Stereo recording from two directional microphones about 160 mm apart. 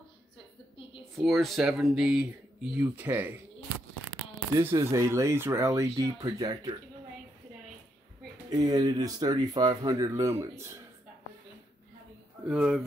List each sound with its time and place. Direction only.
1.1 s speech: centre (ahead or behind)
4.6 s speech: 15° right (ahead or behind)
8.5 s speech: 25° right (ahead or behind)
12.4 s speech: 5° right (ahead or behind)